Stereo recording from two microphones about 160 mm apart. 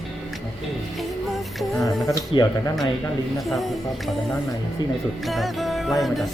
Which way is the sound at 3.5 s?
Centre (ahead or behind).